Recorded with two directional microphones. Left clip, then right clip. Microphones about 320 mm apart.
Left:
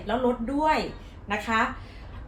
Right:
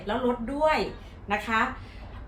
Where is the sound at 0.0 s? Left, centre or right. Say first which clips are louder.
Left 2 dB; centre.